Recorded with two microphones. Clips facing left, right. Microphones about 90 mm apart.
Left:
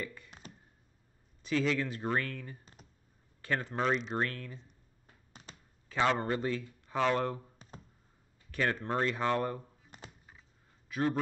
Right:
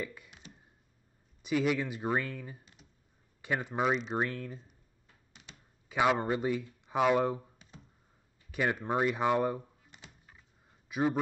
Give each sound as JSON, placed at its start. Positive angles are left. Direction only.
{"t": 0.0, "sound": "speech", "side_deg": -5}
{"t": 1.4, "sound": "speech", "side_deg": -15}
{"t": 2.6, "sound": "computer keyboard", "side_deg": 40}
{"t": 3.4, "sound": "speech", "side_deg": -10}
{"t": 5.3, "sound": "computer keyboard", "side_deg": 40}
{"t": 5.9, "sound": "speech", "side_deg": -10}
{"t": 8.5, "sound": "speech", "side_deg": -15}
{"t": 9.8, "sound": "computer keyboard", "side_deg": 40}
{"t": 10.9, "sound": "a man's voice", "side_deg": -15}